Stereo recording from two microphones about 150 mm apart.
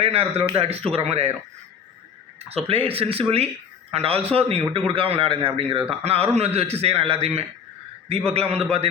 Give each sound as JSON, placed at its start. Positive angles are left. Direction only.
{"t": 0.0, "sound": "a man's voice", "side_deg": -40}
{"t": 2.6, "sound": "a man's voice", "side_deg": -40}